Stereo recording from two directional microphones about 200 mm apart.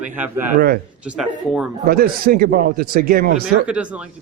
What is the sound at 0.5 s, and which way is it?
Speech, 45° right (ahead or behind).